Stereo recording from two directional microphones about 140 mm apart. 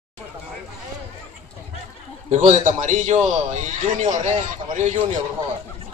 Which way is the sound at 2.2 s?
60° right (ahead or behind).